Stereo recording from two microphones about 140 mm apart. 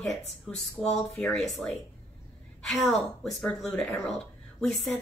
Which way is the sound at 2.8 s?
10° left (ahead or behind).